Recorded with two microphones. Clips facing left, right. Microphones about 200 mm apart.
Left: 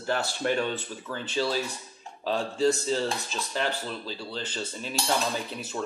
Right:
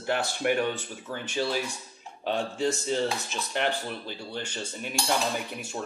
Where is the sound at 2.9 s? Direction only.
20° right (ahead or behind).